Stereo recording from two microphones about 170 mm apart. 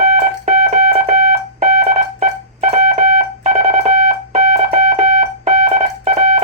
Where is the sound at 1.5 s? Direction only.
40° right (ahead or behind).